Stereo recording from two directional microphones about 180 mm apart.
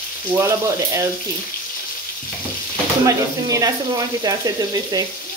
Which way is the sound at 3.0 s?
20° right (ahead or behind).